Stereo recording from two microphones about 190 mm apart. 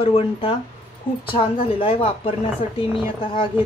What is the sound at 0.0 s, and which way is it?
A woman's voice, 30° left (ahead or behind).